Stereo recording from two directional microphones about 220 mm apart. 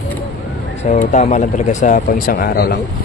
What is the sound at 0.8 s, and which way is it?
Speech, 30° left (ahead or behind).